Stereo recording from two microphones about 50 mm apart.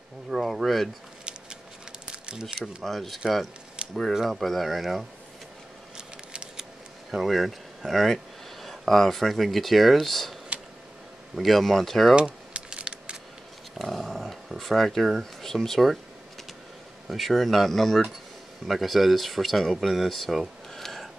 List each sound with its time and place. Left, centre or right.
0.3 s speech: centre
1.2 s a sound: centre
2.6 s speech: centre
5.9 s scissors: centre
7.1 s speech: centre
11.3 s speech: centre
12.2 s keys jangling: right
12.6 s a sound: centre
13.7 s dog: centre
15.4 s speech: centre
17.1 s speech: centre
19.9 s a sound: centre